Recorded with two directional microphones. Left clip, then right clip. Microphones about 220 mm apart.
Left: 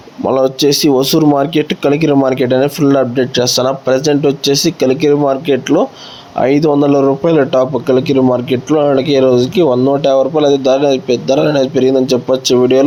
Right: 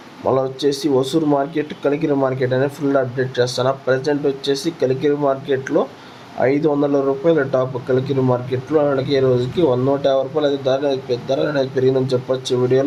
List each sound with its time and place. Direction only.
0.3 s speech: 35° left (ahead or behind)